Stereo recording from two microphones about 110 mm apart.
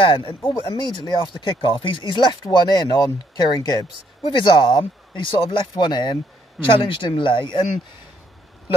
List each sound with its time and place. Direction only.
0.0 s speech: 50° left (ahead or behind)